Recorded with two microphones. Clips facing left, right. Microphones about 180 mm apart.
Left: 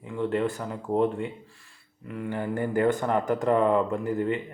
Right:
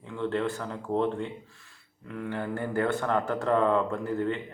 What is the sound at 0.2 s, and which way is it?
Speech, 15° left (ahead or behind).